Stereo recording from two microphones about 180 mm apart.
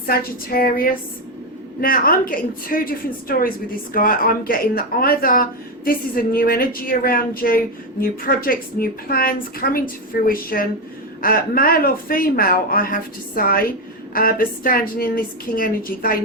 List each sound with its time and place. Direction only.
0.0 s speech: 55° left (ahead or behind)